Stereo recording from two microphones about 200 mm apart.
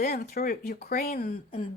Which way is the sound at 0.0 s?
50° left (ahead or behind).